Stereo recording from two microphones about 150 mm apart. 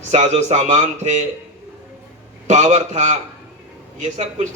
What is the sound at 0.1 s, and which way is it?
Speech, 50° right (ahead or behind).